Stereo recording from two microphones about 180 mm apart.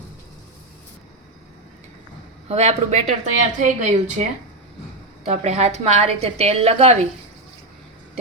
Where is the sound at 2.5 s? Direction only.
35° right (ahead or behind).